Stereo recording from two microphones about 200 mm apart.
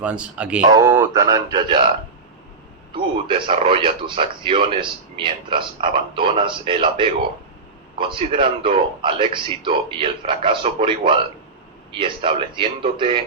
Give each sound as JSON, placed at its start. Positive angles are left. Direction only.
{"t": 0.0, "sound": "speech", "side_deg": -5}
{"t": 0.6, "sound": "speech", "side_deg": -15}
{"t": 2.9, "sound": "speech", "side_deg": -25}